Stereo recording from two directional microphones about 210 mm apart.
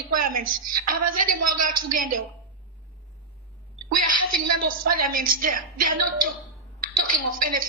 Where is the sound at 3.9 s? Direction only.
40° right (ahead or behind).